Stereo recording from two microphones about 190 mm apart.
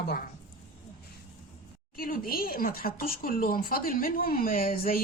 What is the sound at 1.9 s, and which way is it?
Speech, 50° left (ahead or behind).